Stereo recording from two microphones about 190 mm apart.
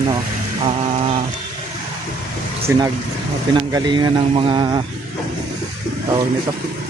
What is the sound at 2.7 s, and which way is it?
Speech, 15° right (ahead or behind).